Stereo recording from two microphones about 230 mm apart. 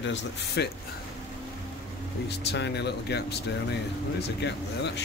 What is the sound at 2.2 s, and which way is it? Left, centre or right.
Speech, left.